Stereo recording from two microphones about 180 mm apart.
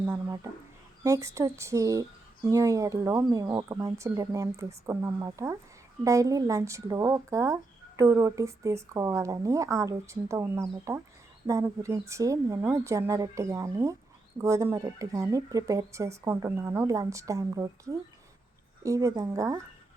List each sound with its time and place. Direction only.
0.0 s speech: 15° right (ahead or behind)